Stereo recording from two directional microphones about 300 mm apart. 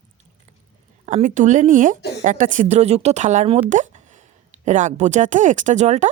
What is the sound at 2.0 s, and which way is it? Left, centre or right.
Speech, left.